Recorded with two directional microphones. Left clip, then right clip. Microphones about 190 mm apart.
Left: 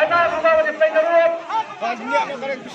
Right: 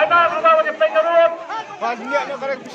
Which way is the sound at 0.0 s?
25° left (ahead or behind).